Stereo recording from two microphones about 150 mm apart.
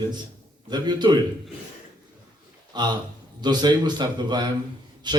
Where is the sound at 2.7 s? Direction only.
30° right (ahead or behind).